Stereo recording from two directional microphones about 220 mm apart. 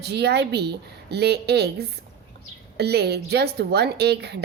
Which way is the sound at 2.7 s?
50° right (ahead or behind).